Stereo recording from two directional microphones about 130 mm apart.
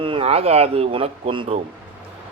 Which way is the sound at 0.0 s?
45° right (ahead or behind).